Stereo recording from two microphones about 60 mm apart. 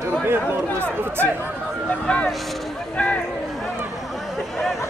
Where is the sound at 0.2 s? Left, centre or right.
Right.